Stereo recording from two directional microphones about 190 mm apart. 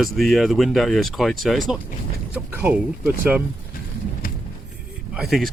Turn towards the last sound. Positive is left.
turn(degrees=0)  # may be behind; listen again after turning